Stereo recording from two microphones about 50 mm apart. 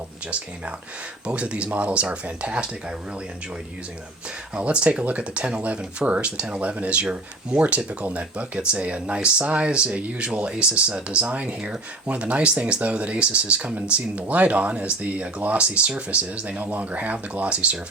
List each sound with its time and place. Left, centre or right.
1.3 s speech: right
4.5 s speech: right